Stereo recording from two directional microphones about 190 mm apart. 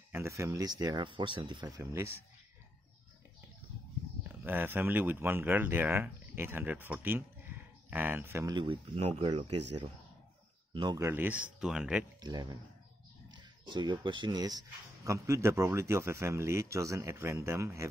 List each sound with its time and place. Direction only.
0.1 s speech: 15° right (ahead or behind)
1.8 s speech: 15° right (ahead or behind)
4.2 s speech: 10° right (ahead or behind); by 9.5 s 25° right (ahead or behind)
10.7 s speech: 25° right (ahead or behind)
11.1 s speech: 10° right (ahead or behind)
12.2 s speech: 20° right (ahead or behind)